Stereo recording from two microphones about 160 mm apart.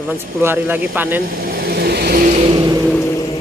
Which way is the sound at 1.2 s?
65° right (ahead or behind).